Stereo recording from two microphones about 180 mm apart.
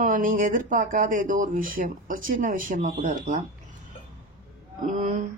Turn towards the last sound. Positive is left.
turn(degrees=-40)  # may be behind; listen again after turning